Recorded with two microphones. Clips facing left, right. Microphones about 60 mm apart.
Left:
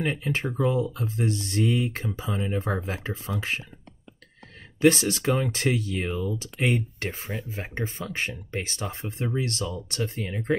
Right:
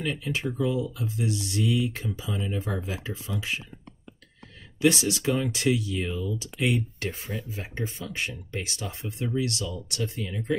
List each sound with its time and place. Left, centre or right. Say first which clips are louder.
0.0 s speech: left 2 dB; left
4.7 s speech: left 3 dB; left